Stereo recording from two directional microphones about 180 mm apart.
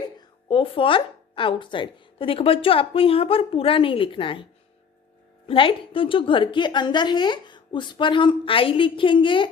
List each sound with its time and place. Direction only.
0.2 s a woman's voice: 30° left (ahead or behind)
5.5 s a woman's voice: 30° left (ahead or behind)